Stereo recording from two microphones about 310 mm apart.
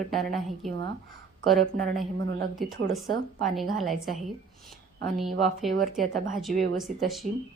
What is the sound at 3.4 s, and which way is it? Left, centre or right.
A woman's voice, centre.